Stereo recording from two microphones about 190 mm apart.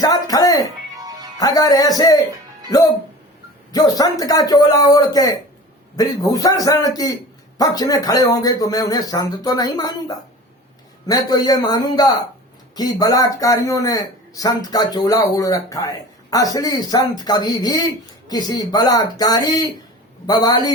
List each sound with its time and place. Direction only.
0.0 s music: 20° left (ahead or behind)
1.4 s speech: 20° left (ahead or behind)